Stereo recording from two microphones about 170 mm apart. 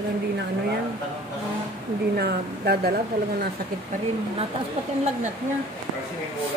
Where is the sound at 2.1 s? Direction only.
70° right (ahead or behind).